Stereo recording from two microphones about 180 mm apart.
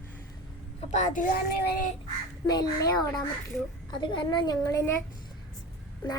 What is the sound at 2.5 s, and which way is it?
A woman's voice, 20° left (ahead or behind).